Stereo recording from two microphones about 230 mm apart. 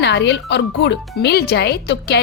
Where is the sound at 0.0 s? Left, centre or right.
Left.